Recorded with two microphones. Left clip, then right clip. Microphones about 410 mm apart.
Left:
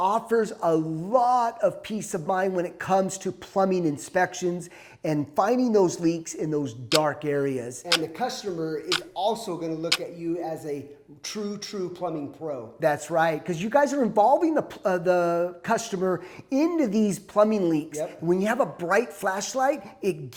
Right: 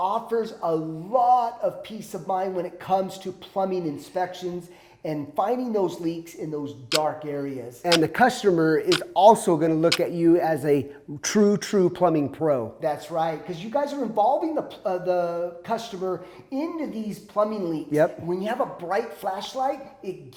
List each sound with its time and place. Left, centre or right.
0.0 s a man's voice: left
5.0 s a man's voice: left
8.0 s speech: right
12.8 s a man's voice: left